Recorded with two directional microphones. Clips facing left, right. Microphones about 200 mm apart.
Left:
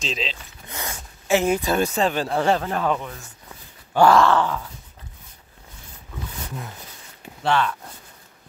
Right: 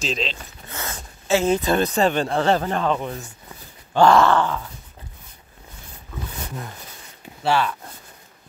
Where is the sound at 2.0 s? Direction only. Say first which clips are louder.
Right 2 dB; centre (ahead or behind).